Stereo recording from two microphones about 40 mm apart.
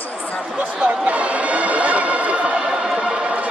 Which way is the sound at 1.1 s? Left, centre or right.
Right.